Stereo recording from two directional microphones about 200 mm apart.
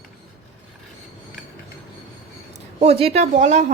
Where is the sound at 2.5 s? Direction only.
30° right (ahead or behind).